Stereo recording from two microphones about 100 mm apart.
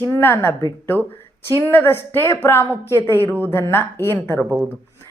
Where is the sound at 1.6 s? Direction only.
20° left (ahead or behind).